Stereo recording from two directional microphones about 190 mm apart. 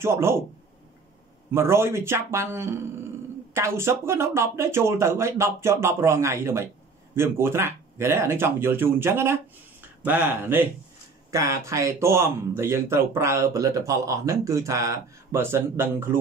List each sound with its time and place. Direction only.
0.0 s speech: 15° right (ahead or behind)
1.5 s speech: 15° right (ahead or behind)